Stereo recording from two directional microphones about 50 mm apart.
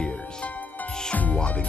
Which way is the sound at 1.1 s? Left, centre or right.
Left.